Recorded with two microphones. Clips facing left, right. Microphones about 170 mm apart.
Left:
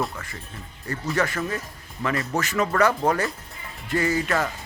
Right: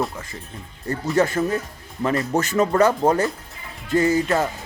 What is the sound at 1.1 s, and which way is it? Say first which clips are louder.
A man's voice: right 6 dB; 25° right (ahead or behind).